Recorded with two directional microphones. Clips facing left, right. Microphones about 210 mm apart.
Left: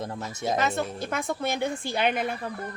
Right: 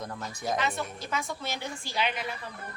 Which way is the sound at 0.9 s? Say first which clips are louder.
Left 5 dB; 55° left (ahead or behind).